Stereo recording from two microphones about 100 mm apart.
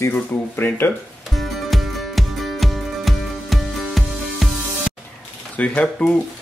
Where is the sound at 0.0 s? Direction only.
20° left (ahead or behind).